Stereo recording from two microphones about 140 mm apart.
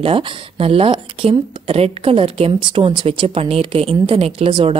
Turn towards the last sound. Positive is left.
turn(degrees=-40)  # may be behind; listen again after turning